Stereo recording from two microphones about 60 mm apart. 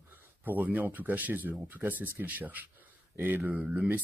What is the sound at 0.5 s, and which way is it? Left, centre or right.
Speech, right.